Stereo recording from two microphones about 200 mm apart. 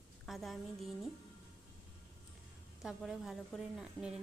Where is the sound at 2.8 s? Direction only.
Centre (ahead or behind).